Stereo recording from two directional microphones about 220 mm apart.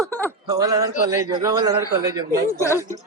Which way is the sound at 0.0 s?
10° left (ahead or behind).